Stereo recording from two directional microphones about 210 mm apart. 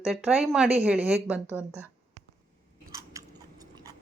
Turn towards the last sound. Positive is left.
turn(degrees=-15)  # may be behind; listen again after turning